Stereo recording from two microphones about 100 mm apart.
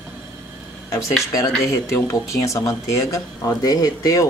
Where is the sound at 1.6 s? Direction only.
30° left (ahead or behind).